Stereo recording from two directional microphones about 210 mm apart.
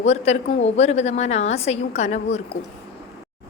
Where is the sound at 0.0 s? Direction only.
30° left (ahead or behind).